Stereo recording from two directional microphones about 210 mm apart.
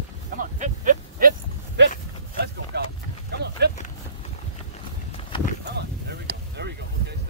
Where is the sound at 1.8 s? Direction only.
60° right (ahead or behind).